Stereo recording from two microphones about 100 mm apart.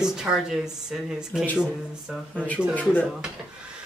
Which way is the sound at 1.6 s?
5° right (ahead or behind).